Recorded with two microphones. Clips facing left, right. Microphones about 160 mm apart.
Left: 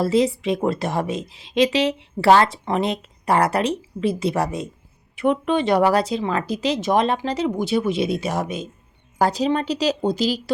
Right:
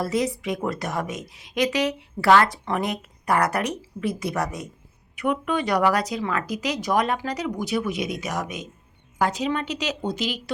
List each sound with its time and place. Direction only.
0.0 s speech: 30° left (ahead or behind)